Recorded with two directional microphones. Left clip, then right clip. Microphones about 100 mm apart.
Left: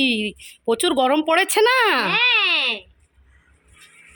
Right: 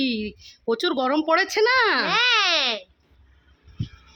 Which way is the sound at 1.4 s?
30° left (ahead or behind).